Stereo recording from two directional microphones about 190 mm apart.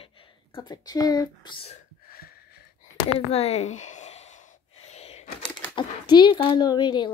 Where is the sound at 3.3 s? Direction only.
35° left (ahead or behind).